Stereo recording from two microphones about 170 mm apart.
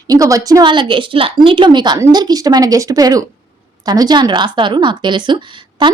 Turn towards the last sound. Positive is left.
turn(degrees=-30)  # may be behind; listen again after turning